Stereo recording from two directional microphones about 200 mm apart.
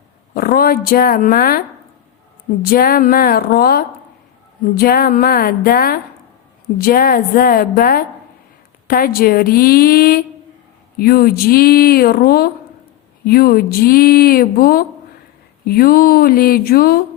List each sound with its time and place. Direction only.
0.3 s speech: 45° left (ahead or behind)
2.6 s speech: 50° left (ahead or behind)